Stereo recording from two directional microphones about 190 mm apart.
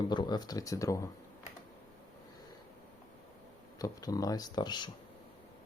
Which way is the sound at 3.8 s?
20° left (ahead or behind).